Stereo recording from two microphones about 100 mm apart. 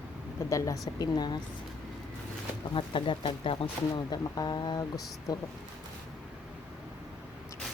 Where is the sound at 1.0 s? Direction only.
45° left (ahead or behind).